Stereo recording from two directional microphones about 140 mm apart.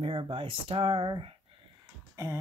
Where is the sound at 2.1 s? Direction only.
20° right (ahead or behind).